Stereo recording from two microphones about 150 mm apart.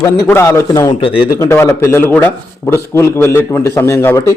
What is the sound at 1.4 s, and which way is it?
A man's voice, 20° left (ahead or behind).